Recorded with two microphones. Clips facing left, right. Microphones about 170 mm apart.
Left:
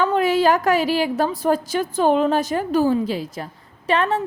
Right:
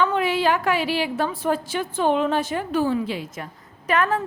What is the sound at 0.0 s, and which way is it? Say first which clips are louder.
A woman's voice: left 3 dB; 40° left (ahead or behind).